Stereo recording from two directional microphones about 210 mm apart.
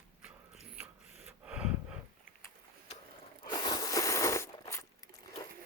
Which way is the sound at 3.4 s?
20° left (ahead or behind).